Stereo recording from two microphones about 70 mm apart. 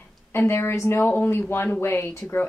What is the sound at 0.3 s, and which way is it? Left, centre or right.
Speech, left.